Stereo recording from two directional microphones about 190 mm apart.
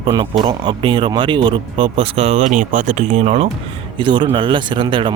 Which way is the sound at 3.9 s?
25° right (ahead or behind).